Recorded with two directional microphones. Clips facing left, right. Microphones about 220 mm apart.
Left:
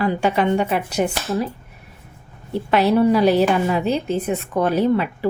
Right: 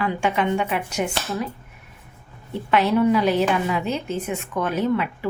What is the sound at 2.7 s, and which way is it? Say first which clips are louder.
Speech: left 3 dB; 35° left (ahead or behind).